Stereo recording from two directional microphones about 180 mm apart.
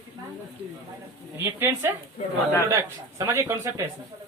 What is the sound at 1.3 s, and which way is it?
A man's voice, 15° right (ahead or behind).